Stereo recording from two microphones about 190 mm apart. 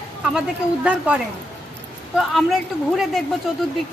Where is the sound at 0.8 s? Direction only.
5° right (ahead or behind).